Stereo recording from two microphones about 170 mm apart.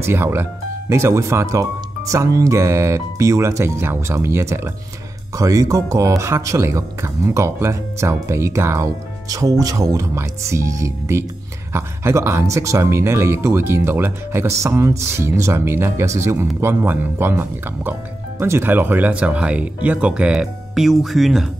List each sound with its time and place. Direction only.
0.0 s speech: 15° right (ahead or behind)